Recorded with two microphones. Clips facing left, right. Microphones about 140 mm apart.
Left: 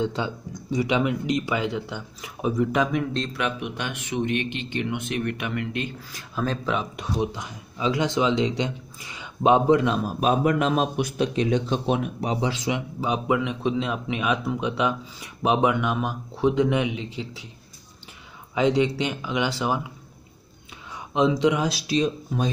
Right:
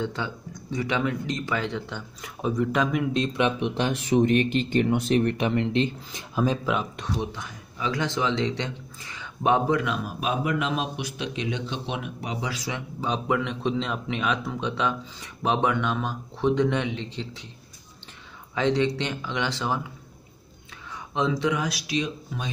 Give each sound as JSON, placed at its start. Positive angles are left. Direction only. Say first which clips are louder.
{"t": 0.0, "sound": "speech", "louder": "left 4 dB", "side_deg": 20}
{"t": 3.2, "sound": "speech", "louder": "right 4 dB", "side_deg": -25}
{"t": 7.0, "sound": "speech", "louder": "left 3 dB", "side_deg": 15}
{"t": 9.9, "sound": "speech", "louder": "left 6 dB", "side_deg": 40}
{"t": 18.5, "sound": "speech", "louder": "left 2 dB", "side_deg": 15}
{"t": 21.1, "sound": "speech", "louder": "left 4 dB", "side_deg": 15}